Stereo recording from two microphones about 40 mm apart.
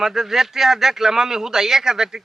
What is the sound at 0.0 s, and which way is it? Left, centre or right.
Speech, centre.